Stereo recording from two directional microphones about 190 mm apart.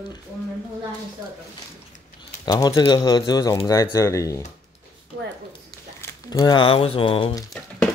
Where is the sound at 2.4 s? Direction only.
20° left (ahead or behind).